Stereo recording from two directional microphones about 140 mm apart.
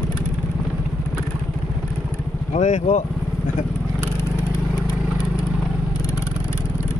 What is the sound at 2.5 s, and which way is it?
Speech, 55° left (ahead or behind).